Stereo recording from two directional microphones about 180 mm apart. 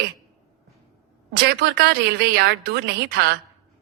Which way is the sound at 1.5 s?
65° right (ahead or behind).